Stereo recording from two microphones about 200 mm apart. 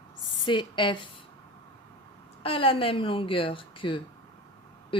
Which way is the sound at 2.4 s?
25° left (ahead or behind).